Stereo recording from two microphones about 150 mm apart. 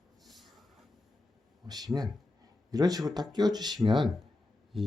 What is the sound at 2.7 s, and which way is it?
Speech, 25° right (ahead or behind).